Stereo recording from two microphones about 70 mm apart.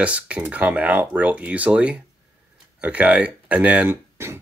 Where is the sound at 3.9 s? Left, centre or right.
Right.